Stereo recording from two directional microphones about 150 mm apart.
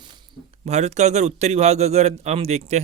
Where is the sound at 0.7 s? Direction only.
50° right (ahead or behind).